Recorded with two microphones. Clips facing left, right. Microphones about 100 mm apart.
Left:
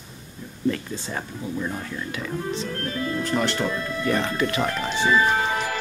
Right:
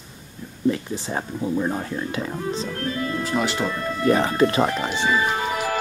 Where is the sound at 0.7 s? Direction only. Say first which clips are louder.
Right 3 dB; 30° right (ahead or behind).